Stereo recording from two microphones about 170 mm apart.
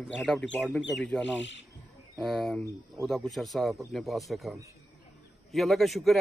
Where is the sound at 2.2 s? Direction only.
5° left (ahead or behind).